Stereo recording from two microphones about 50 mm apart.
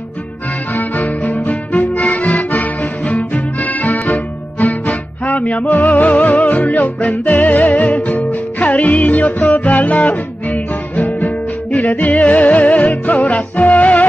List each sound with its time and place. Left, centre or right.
0.7 s music: left